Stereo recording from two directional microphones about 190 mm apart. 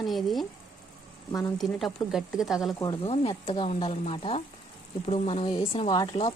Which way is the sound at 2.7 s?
25° left (ahead or behind).